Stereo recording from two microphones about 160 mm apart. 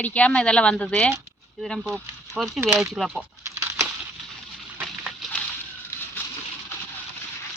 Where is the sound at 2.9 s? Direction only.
Centre (ahead or behind).